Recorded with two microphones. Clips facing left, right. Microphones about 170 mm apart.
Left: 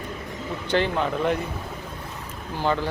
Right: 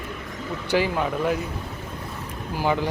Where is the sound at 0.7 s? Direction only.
5° right (ahead or behind).